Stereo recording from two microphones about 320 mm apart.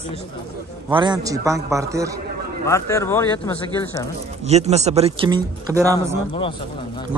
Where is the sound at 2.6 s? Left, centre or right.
Centre.